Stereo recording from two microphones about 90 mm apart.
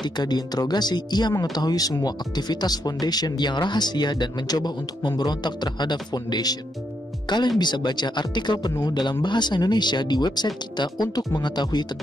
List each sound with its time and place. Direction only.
0.0 s speech: 50° left (ahead or behind)